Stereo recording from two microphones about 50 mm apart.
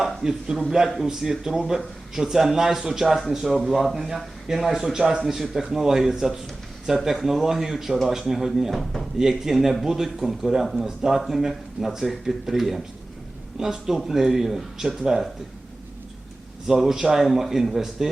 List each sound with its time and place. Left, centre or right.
0.0 s a man's voice: centre
9.4 s speech: centre
16.6 s speech: centre